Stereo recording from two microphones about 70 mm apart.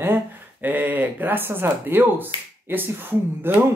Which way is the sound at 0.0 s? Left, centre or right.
Right.